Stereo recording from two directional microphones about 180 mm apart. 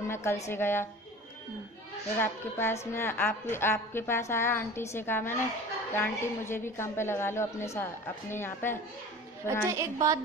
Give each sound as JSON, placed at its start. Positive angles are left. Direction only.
{"t": 0.1, "sound": "a sound", "side_deg": 15}
{"t": 0.5, "sound": "a woman's voice", "side_deg": 15}
{"t": 2.1, "sound": "a woman's voice", "side_deg": 10}
{"t": 9.7, "sound": "a woman's voice", "side_deg": -15}